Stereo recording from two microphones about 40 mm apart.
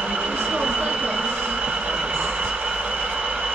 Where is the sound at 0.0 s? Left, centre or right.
Right.